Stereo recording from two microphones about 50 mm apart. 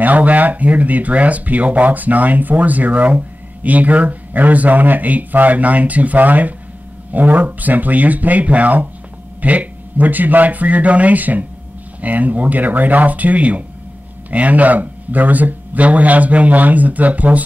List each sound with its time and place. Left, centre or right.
0.0 s speech: right